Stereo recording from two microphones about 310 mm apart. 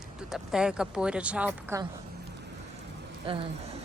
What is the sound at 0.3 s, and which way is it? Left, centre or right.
Speech, centre.